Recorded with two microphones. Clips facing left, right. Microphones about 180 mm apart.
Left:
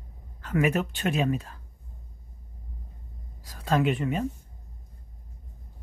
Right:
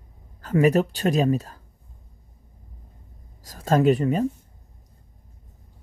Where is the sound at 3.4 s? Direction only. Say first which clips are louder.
Right 6 dB; 45° right (ahead or behind).